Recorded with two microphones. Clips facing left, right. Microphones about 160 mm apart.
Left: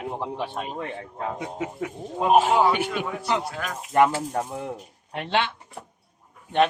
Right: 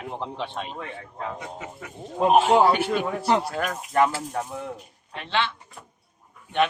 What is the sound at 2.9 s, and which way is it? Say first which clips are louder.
Speech: right 4 dB; 40° right (ahead or behind).